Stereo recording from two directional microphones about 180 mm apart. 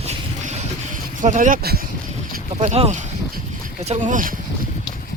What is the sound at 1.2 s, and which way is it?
Speech, 45° right (ahead or behind).